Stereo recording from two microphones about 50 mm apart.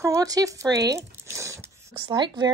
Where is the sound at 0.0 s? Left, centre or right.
Right.